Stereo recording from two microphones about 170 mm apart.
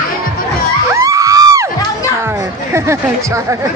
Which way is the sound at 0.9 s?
20° right (ahead or behind).